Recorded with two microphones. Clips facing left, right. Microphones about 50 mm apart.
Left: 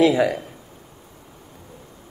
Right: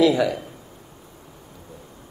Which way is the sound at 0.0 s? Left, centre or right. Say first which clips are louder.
Left 1 dB; left.